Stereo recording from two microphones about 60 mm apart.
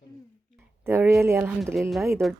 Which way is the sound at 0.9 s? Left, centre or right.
Right.